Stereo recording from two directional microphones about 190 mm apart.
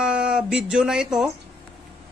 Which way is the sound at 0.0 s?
5° right (ahead or behind).